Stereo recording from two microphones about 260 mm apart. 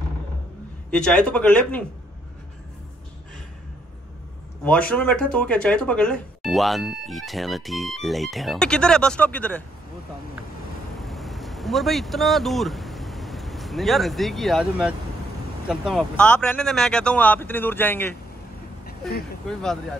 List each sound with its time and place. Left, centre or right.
0.8 s speech: centre
4.6 s speech: centre
11.0 s speech: centre
18.9 s vehicle: left
19.4 s speech: centre